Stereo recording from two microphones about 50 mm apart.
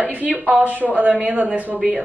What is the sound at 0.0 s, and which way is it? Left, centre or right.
A woman's voice, right.